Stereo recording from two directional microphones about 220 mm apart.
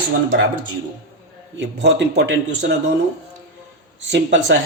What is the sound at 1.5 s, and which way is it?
Speech, 50° right (ahead or behind).